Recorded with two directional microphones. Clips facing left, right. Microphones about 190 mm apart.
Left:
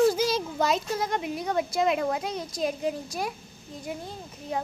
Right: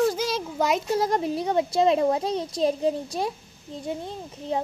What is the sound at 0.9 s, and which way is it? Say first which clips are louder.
A child's voice: right 5 dB; 35° right (ahead or behind).